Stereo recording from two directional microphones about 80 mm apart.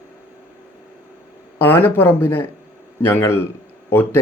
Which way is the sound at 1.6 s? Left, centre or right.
Left.